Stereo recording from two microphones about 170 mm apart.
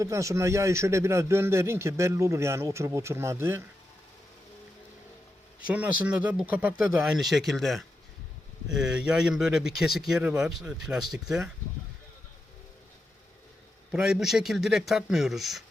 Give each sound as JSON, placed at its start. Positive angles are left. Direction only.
{"t": 0.0, "sound": "a man's voice", "side_deg": -20}
{"t": 5.6, "sound": "speech", "side_deg": -10}
{"t": 13.9, "sound": "speech", "side_deg": -5}